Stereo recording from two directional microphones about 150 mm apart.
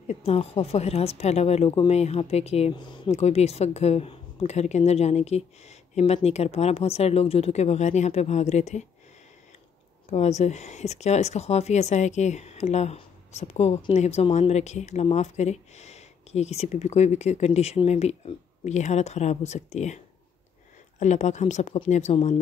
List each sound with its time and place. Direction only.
0.1 s speech: 45° left (ahead or behind)
2.7 s speech: 30° left (ahead or behind)
3.1 s speech: 45° left (ahead or behind)
10.0 s speech: 45° left (ahead or behind)
21.0 s speech: 50° left (ahead or behind)